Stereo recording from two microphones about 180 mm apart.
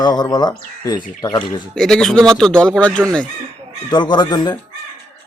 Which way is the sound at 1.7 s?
5° left (ahead or behind).